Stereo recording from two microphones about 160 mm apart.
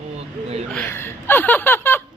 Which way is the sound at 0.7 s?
10° left (ahead or behind).